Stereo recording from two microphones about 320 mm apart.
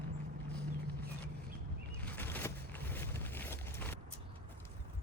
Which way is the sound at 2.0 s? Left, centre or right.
Centre.